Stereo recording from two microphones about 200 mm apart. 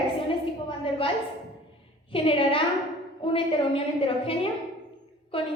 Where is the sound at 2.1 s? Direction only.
25° left (ahead or behind).